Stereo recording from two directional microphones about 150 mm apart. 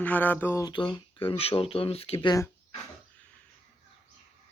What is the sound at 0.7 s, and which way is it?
Speech, 30° left (ahead or behind).